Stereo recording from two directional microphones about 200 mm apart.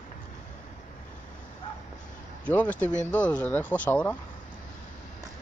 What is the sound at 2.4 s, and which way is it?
Speech, 10° left (ahead or behind).